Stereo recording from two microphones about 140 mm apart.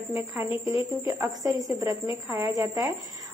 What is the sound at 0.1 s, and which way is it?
A woman's voice, 15° right (ahead or behind).